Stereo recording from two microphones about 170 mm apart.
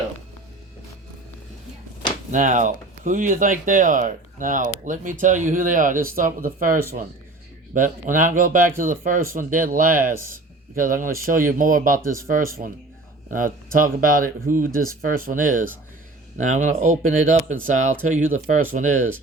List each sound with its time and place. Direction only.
2.3 s speech: 50° right (ahead or behind)
13.7 s speech: 55° right (ahead or behind)